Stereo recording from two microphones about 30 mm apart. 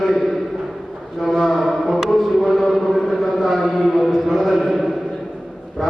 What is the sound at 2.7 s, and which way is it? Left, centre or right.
Chant, centre.